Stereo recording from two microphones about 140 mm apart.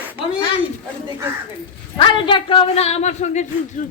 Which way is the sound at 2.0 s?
35° left (ahead or behind).